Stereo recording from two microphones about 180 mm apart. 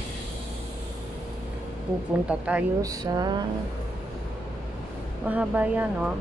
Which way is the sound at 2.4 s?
10° right (ahead or behind).